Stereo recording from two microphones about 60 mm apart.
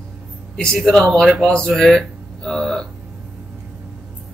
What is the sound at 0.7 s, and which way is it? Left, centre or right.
Speech, centre.